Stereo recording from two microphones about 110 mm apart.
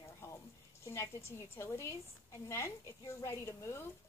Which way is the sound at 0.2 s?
25° left (ahead or behind).